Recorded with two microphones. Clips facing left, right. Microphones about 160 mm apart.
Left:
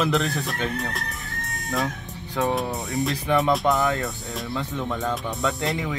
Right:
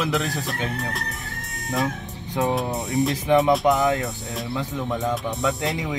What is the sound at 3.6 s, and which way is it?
Speech, 20° right (ahead or behind).